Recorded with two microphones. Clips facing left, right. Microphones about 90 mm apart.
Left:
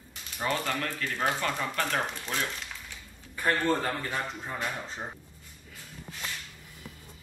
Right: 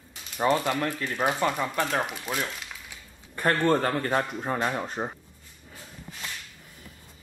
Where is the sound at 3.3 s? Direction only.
55° right (ahead or behind).